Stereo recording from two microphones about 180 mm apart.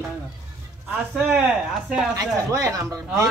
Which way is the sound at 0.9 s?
5° right (ahead or behind).